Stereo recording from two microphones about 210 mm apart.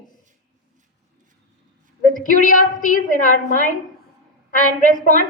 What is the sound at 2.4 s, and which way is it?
A woman's voice, 40° left (ahead or behind).